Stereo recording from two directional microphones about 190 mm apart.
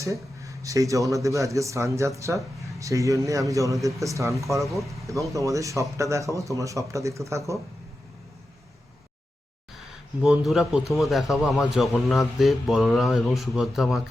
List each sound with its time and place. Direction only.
0.0 s speech: 15° right (ahead or behind)
4.6 s a man's voice: centre (ahead or behind)
5.3 s speech: 15° right (ahead or behind)
10.2 s a man's voice: 5° right (ahead or behind)